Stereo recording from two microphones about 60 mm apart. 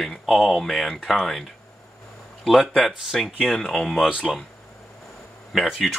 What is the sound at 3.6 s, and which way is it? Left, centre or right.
Speech, centre.